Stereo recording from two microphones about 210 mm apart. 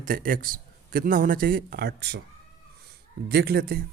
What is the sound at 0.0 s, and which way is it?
A man's voice, 40° right (ahead or behind).